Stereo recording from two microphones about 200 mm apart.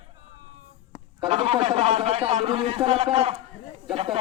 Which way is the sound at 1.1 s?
25° right (ahead or behind).